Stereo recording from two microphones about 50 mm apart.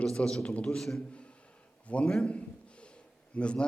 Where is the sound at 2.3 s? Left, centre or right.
Left.